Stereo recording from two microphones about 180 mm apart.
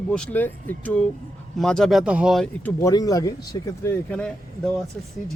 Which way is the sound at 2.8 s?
20° left (ahead or behind).